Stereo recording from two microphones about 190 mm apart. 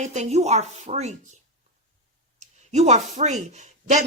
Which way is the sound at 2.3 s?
35° right (ahead or behind).